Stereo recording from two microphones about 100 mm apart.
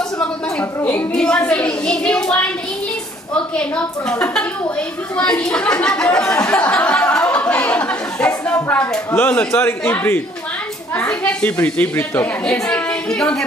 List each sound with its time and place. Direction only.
0.7 s a man's voice: 25° left (ahead or behind)
1.1 s a woman's voice: 10° left (ahead or behind)
3.3 s a woman's voice: 10° left (ahead or behind)
12.4 s a woman's voice: 5° left (ahead or behind)